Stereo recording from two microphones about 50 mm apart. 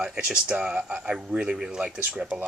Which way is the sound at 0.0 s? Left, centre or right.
Centre.